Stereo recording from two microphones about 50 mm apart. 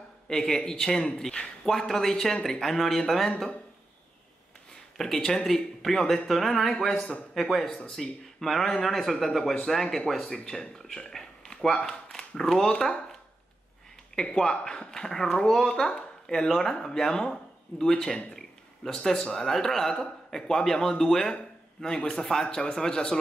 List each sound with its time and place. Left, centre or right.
0.3 s speech: centre
4.9 s speech: centre
7.0 s a man's voice: left
7.3 s speech: centre
14.1 s speech: centre